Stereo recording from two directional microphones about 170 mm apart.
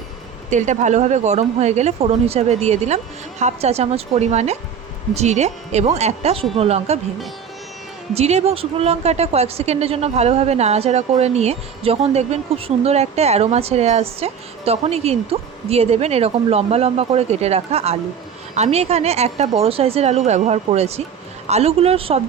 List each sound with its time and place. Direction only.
0.5 s a woman's voice: 45° right (ahead or behind)
8.1 s a woman's voice: 40° right (ahead or behind)